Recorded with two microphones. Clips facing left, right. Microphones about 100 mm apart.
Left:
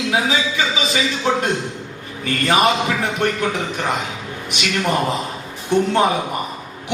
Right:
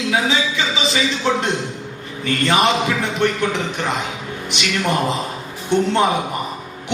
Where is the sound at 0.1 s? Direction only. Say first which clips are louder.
Right 1 dB; 45° left (ahead or behind).